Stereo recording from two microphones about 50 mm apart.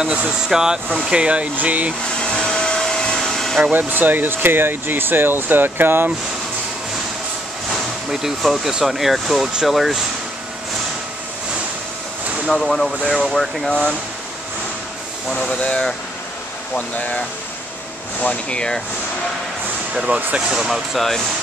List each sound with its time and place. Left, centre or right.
0.0 s speech: centre
2.1 s vacuum cleaner: centre
3.7 s speech: right
8.1 s speech: centre
12.4 s speech: centre
15.2 s speech: centre
18.2 s speech: left
20.1 s speech: right
20.3 s speech: centre